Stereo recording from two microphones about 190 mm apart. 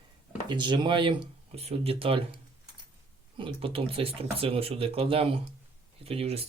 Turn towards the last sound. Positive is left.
turn(degrees=-30)  # may be behind; listen again after turning